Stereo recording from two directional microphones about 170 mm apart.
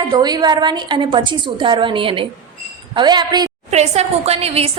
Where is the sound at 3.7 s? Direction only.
40° right (ahead or behind).